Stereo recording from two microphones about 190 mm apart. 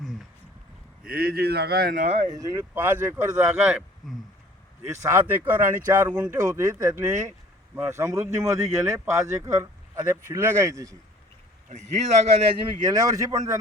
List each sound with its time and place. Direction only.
1.0 s speech: 50° right (ahead or behind)
2.0 s speech: 35° right (ahead or behind)
2.3 s speech: 15° right (ahead or behind)
11.7 s speech: 35° right (ahead or behind)
12.8 s speech: 20° right (ahead or behind)